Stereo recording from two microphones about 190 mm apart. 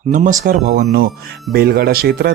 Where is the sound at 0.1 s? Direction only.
45° right (ahead or behind).